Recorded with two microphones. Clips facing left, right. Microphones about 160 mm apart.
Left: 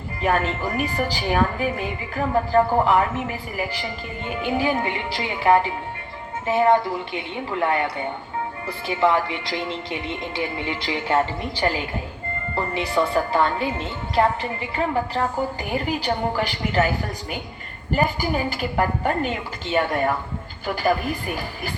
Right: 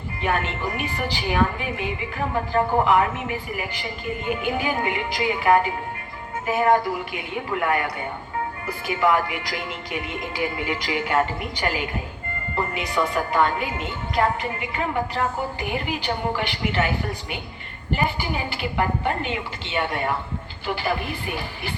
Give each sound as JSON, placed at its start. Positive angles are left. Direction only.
{"t": 0.2, "sound": "a woman's voice", "side_deg": 35}
{"t": 4.4, "sound": "a woman's voice", "side_deg": 30}
{"t": 17.9, "sound": "a woman's voice", "side_deg": 40}